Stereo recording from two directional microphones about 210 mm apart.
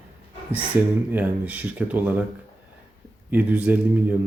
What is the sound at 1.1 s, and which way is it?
Speech, 10° right (ahead or behind).